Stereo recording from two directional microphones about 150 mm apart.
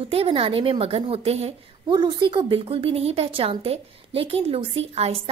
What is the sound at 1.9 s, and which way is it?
Speech, 30° right (ahead or behind).